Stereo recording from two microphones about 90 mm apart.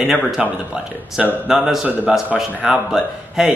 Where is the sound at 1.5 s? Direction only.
5° right (ahead or behind).